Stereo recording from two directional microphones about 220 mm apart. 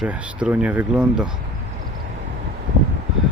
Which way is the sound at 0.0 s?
5° right (ahead or behind).